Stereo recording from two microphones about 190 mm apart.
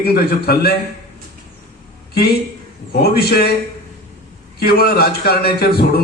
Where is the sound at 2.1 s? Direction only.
55° left (ahead or behind).